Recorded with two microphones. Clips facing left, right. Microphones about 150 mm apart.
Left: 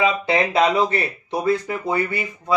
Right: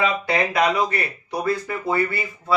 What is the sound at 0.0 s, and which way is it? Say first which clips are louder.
Speech: left 2 dB; 25° left (ahead or behind).